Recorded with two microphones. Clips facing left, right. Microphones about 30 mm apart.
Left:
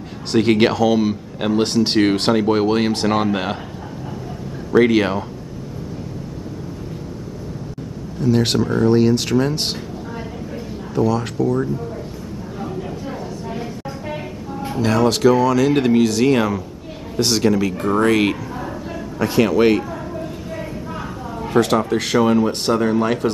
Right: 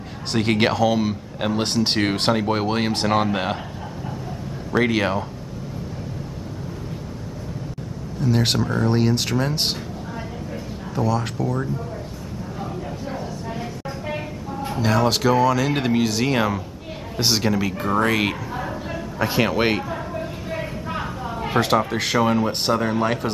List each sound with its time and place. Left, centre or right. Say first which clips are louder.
0.3 s speech: left 5 dB; centre
4.7 s speech: left 5 dB; centre
8.2 s speech: left 4 dB; centre
11.0 s speech: left 4 dB; centre
13.5 s a sound: left 2 dB; centre
17.2 s speech: left 4 dB; centre
19.1 s a man's voice: left 5 dB; centre
21.5 s speech: left 3 dB; centre